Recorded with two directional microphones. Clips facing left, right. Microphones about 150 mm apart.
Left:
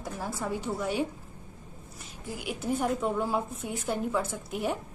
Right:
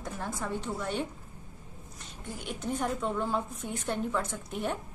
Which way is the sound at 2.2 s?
5° left (ahead or behind).